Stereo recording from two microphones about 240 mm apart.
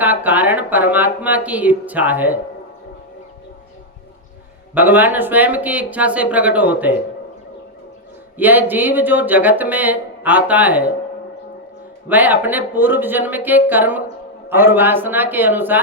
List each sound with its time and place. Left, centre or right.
0.0 s speech: centre
4.7 s speech: centre
8.4 s speech: centre
12.0 s speech: centre